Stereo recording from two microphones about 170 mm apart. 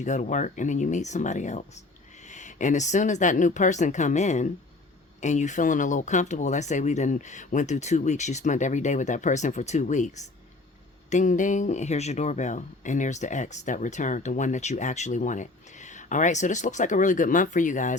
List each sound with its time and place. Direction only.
0.0 s speech: 45° left (ahead or behind)